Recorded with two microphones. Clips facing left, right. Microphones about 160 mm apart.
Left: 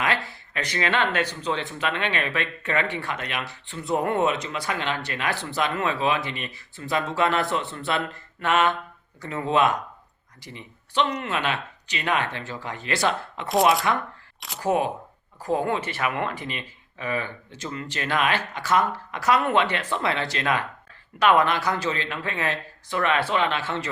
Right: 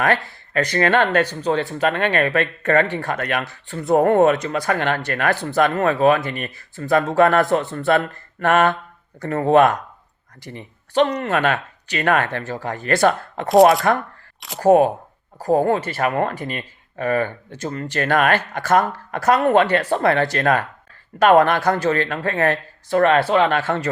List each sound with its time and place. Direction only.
0.0 s speech: 50° right (ahead or behind)
13.5 s speech: centre (ahead or behind)
14.6 s speech: 45° right (ahead or behind)